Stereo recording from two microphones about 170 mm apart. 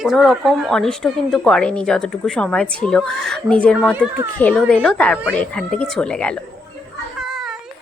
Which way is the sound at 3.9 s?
10° right (ahead or behind).